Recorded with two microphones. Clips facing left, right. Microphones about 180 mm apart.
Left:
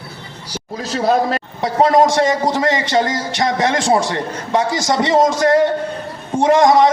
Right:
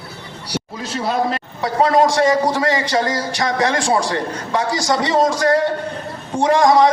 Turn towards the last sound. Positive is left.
turn(degrees=20)  # may be behind; listen again after turning